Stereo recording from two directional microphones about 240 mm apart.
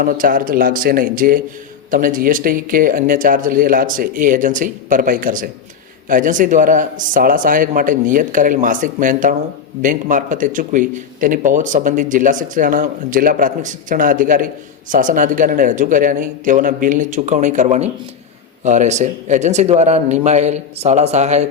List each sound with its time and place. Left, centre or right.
0.0 s a man's voice: right